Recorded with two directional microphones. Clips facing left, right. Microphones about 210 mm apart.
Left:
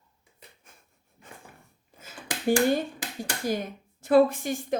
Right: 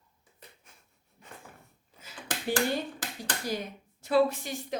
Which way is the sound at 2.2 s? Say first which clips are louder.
Left 7 dB; 10° left (ahead or behind).